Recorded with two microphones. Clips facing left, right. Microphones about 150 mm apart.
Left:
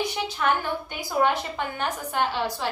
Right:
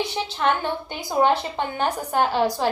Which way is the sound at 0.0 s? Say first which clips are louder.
Right 2 dB; 25° right (ahead or behind).